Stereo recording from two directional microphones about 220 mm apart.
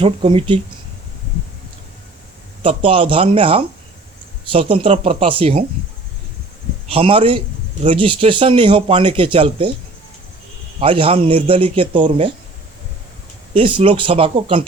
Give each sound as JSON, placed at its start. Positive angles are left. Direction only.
{"t": 0.0, "sound": "speech", "side_deg": -25}
{"t": 2.6, "sound": "speech", "side_deg": -25}
{"t": 6.9, "sound": "speech", "side_deg": -25}
{"t": 10.8, "sound": "speech", "side_deg": -25}
{"t": 13.5, "sound": "speech", "side_deg": -25}